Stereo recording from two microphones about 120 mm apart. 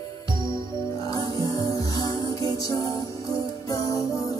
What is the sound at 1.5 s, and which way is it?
Music, 30° left (ahead or behind).